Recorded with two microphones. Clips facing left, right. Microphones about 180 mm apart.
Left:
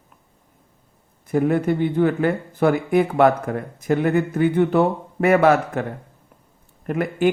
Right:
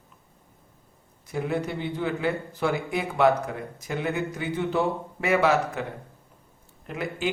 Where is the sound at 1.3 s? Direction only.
55° left (ahead or behind).